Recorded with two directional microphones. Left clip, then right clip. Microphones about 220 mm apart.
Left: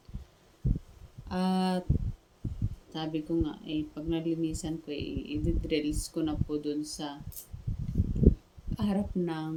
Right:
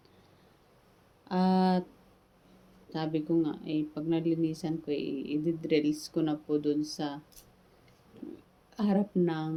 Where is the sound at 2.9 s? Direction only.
15° left (ahead or behind).